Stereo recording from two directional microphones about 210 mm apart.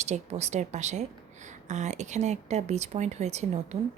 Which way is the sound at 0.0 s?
30° right (ahead or behind).